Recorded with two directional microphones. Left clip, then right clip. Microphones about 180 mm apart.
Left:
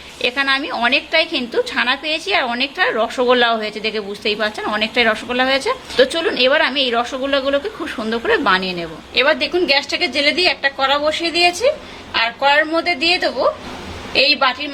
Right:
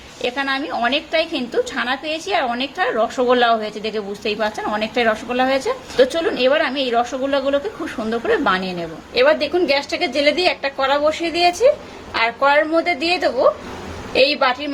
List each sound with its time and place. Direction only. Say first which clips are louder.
0.2 s a woman's voice: left 4 dB; centre (ahead or behind)
9.1 s a woman's voice: even; 15° right (ahead or behind)